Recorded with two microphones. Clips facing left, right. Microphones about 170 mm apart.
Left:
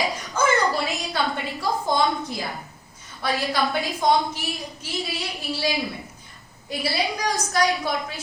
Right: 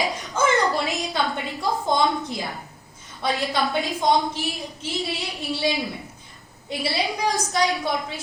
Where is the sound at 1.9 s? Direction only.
20° right (ahead or behind).